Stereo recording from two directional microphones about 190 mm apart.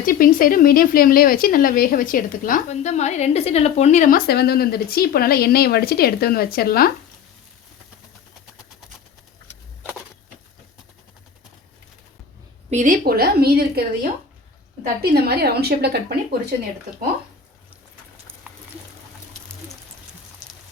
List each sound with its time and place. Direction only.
0.0 s speech: 45° left (ahead or behind)
12.7 s a woman's voice: 45° right (ahead or behind)
15.1 s a woman's voice: 55° right (ahead or behind)
18.5 s a sound: 5° right (ahead or behind)